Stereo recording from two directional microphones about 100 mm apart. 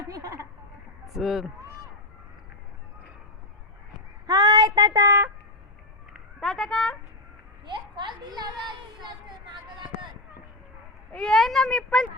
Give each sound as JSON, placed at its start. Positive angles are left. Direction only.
{"t": 0.1, "sound": "a sound", "side_deg": -35}
{"t": 1.0, "sound": "speech", "side_deg": 0}
{"t": 4.3, "sound": "child singing", "side_deg": -40}
{"t": 6.4, "sound": "speech", "side_deg": 5}
{"t": 7.6, "sound": "a woman's voice", "side_deg": -50}
{"t": 11.1, "sound": "speech", "side_deg": 10}